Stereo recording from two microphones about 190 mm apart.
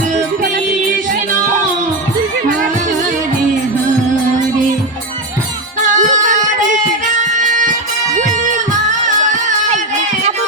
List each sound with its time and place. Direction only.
5.8 s music: 40° right (ahead or behind)